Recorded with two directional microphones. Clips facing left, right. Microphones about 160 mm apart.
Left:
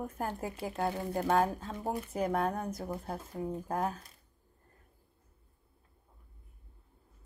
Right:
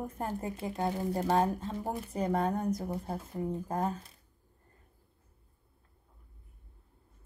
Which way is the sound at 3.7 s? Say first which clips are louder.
Even; 5° left (ahead or behind).